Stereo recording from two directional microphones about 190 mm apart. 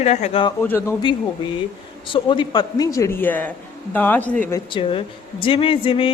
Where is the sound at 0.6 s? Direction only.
10° left (ahead or behind).